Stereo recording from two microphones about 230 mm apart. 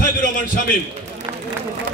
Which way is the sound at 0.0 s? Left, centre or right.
Left.